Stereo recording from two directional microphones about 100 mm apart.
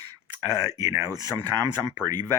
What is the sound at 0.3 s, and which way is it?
Speech, 35° right (ahead or behind).